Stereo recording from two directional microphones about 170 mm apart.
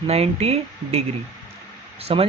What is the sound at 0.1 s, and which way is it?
Speech, 35° right (ahead or behind).